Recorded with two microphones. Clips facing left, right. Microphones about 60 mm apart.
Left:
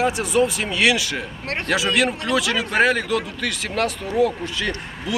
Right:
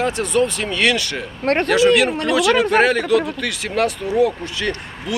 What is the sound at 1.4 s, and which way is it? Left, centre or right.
Speech, right.